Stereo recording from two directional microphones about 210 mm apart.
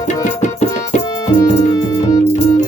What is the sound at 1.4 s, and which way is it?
Music, 15° left (ahead or behind).